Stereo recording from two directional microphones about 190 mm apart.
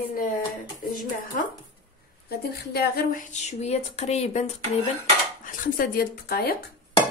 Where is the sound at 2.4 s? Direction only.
55° left (ahead or behind).